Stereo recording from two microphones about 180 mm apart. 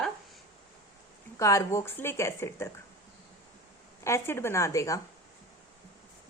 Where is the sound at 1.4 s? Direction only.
15° left (ahead or behind).